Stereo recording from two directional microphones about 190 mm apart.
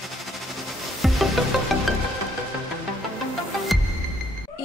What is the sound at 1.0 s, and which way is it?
Music, centre (ahead or behind).